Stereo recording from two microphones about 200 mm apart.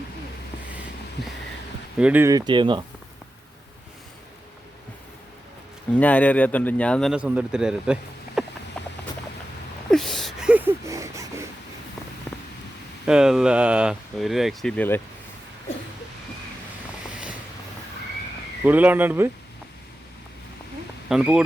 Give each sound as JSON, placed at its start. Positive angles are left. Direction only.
{"t": 2.0, "sound": "speech", "side_deg": -10}
{"t": 5.9, "sound": "speech", "side_deg": 5}
{"t": 8.4, "sound": "a sound", "side_deg": 0}
{"t": 8.8, "sound": "rodents", "side_deg": 5}
{"t": 9.9, "sound": "a sound", "side_deg": 0}
{"t": 13.1, "sound": "speech", "side_deg": -5}
{"t": 18.6, "sound": "speech", "side_deg": -10}
{"t": 21.1, "sound": "speech", "side_deg": -5}